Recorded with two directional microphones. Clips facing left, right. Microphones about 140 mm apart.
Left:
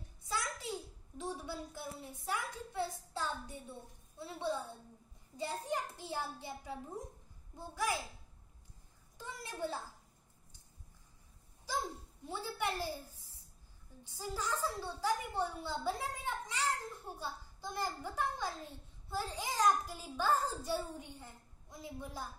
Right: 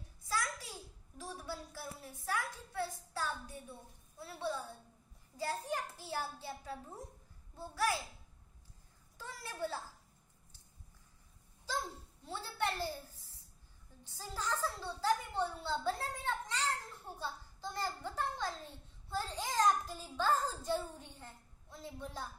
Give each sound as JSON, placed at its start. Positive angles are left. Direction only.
{"t": 0.2, "sound": "a sound", "side_deg": 25}
{"t": 4.2, "sound": "a child's voice", "side_deg": 20}
{"t": 9.2, "sound": "a child's voice", "side_deg": 20}
{"t": 12.3, "sound": "a woman's voice", "side_deg": 10}
{"t": 14.0, "sound": "a woman's voice", "side_deg": 15}